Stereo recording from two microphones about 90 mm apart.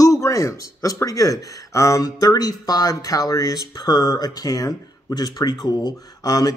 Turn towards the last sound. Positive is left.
turn(degrees=45)  # may be behind; listen again after turning